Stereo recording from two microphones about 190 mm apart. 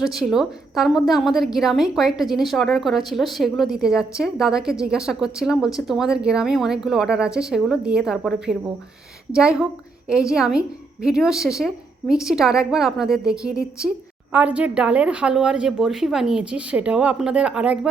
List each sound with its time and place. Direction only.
0.0 s a woman's voice: centre (ahead or behind)